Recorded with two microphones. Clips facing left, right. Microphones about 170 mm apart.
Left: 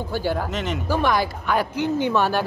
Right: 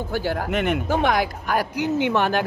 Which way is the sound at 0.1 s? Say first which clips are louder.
Right 1 dB; 60° right (ahead or behind).